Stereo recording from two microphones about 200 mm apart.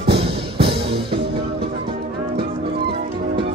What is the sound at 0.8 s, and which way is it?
Music, 25° right (ahead or behind).